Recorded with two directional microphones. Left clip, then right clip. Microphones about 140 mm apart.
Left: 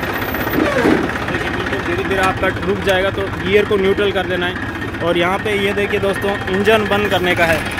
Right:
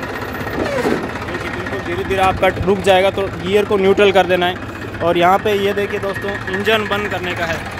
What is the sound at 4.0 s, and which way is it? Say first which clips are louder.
Speech: right 5 dB; 50° right (ahead or behind).